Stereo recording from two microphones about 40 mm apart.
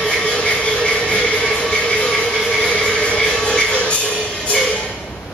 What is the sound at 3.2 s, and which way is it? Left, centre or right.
Music, centre.